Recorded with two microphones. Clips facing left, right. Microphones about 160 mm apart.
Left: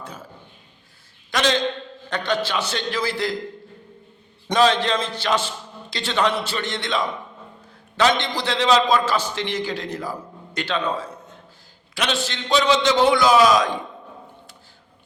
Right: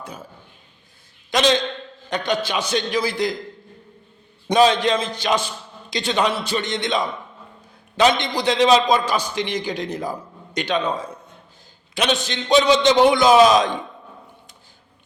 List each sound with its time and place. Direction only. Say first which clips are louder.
0.0 s a sound: right 1 dB; 10° right (ahead or behind)
1.3 s a man's voice: right 2 dB; 20° right (ahead or behind)
4.4 s a man's voice: right 2 dB; 15° right (ahead or behind)